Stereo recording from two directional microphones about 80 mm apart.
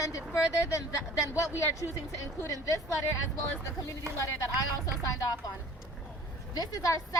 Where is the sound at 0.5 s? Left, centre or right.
Left.